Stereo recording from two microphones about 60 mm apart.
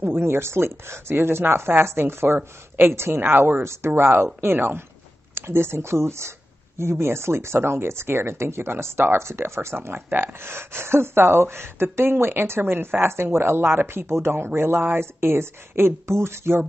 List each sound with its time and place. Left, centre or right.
0.0 s speech: right
0.3 s speech: right
3.2 s speech: right
3.6 s speech: right
9.8 s speech: right